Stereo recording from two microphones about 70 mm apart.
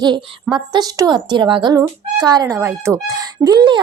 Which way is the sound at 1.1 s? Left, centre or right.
Right.